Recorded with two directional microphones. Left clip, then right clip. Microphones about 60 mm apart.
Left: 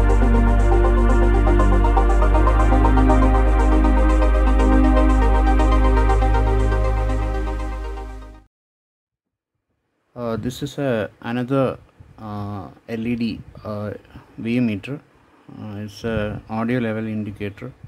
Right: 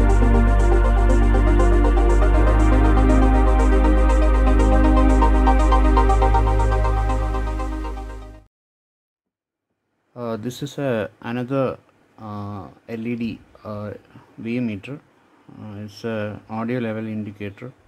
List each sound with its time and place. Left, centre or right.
0.0 s music: centre
10.1 s speech: centre
15.9 s speech: centre